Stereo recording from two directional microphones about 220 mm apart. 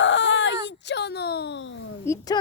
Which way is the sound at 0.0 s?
60° left (ahead or behind).